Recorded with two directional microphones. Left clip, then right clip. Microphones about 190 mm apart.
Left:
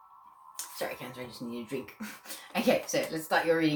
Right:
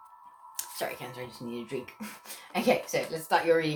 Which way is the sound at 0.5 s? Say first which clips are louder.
Right 1 dB; 50° right (ahead or behind).